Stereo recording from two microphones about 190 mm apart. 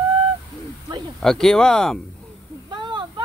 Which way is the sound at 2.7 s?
25° right (ahead or behind).